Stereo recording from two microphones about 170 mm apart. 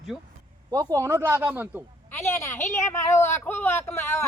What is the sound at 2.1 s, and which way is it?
Speech, 15° left (ahead or behind).